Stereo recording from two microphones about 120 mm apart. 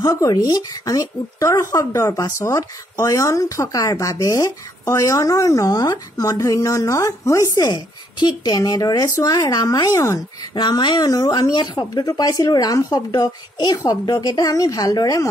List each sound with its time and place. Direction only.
0.0 s speech: 30° left (ahead or behind)
10.5 s speech: 40° left (ahead or behind)